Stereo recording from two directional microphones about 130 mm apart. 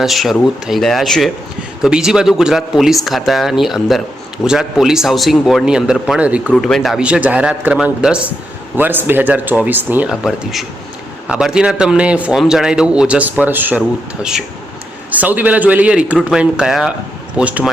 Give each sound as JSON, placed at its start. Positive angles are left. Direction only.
{"t": 0.0, "sound": "speech", "side_deg": 0}
{"t": 6.5, "sound": "speech", "side_deg": 5}
{"t": 10.1, "sound": "speech", "side_deg": -5}